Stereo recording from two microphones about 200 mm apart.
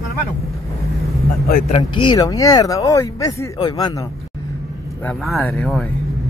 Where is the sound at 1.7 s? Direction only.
25° left (ahead or behind).